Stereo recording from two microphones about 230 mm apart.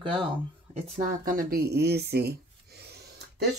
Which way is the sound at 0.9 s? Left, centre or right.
Right.